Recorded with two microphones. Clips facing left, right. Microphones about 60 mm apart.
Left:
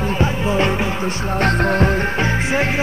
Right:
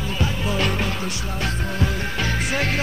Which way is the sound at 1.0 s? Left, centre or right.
Left.